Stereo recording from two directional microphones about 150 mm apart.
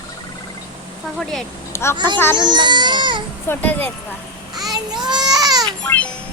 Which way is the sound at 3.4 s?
10° left (ahead or behind).